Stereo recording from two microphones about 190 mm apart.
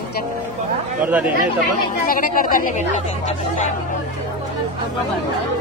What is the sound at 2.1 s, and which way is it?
Speech, 50° left (ahead or behind).